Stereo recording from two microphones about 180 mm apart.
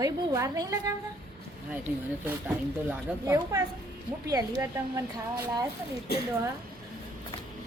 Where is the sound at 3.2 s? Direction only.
20° right (ahead or behind).